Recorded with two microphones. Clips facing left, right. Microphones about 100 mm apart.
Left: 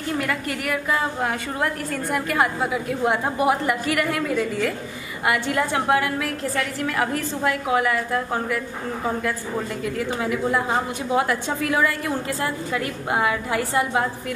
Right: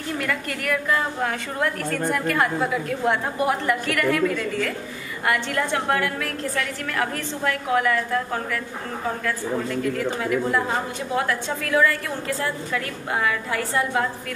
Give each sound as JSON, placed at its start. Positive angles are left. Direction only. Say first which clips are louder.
{"t": 0.3, "sound": "a woman's voice", "louder": "even", "side_deg": 5}
{"t": 10.5, "sound": "a woman's voice", "louder": "left 1 dB", "side_deg": 15}